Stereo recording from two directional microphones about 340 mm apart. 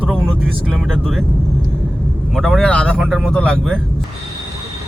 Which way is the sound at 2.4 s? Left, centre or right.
Centre.